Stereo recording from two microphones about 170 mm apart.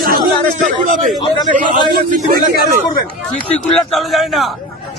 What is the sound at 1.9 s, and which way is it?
Speech, 60° right (ahead or behind).